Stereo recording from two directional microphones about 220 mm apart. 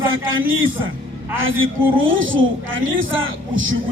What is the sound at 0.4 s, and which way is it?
A man's voice, 65° right (ahead or behind).